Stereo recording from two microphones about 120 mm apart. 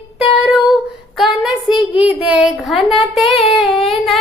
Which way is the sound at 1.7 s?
50° left (ahead or behind).